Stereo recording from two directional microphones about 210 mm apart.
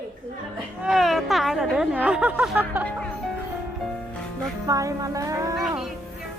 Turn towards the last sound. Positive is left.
turn(degrees=-15)  # may be behind; listen again after turning